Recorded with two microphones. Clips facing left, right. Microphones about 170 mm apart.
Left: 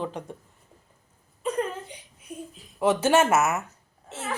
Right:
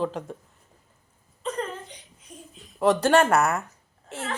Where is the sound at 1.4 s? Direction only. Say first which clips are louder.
Left 3 dB; 10° left (ahead or behind).